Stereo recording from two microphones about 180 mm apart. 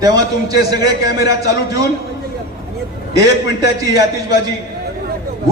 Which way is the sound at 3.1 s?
20° right (ahead or behind).